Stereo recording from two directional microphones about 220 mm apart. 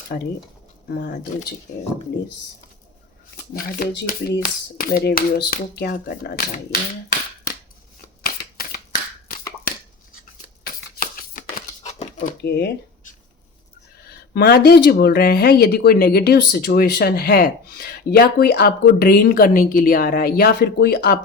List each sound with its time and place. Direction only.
0.9 s speech: 45° left (ahead or behind)
3.5 s speech: 40° left (ahead or behind)
8.2 s shuffling cards: 40° left (ahead or behind)
10.7 s a sound: 40° left (ahead or behind)
12.4 s speech: 50° left (ahead or behind)